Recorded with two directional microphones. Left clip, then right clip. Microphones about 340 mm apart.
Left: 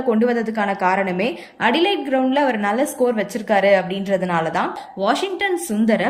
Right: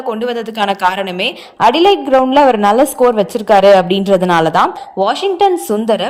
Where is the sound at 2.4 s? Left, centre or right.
Centre.